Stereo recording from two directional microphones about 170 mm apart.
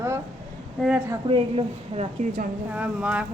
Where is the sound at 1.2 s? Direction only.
35° right (ahead or behind).